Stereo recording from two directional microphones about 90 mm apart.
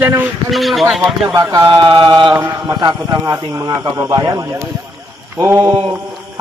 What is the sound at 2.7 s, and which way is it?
A man's voice, 55° right (ahead or behind).